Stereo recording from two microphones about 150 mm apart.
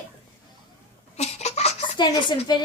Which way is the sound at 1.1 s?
45° left (ahead or behind).